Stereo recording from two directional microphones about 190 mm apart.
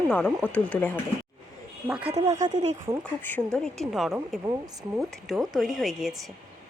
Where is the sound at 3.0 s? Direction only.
10° left (ahead or behind).